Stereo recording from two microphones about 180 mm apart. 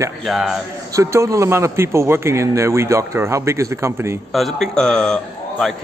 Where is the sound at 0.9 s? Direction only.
20° right (ahead or behind).